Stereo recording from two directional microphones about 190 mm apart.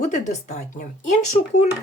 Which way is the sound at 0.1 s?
35° left (ahead or behind).